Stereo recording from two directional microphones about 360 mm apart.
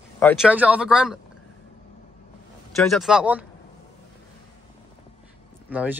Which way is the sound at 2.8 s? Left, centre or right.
Centre.